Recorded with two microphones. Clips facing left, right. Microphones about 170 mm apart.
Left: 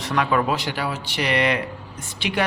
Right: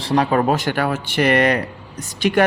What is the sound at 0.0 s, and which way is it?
Speech, 35° right (ahead or behind).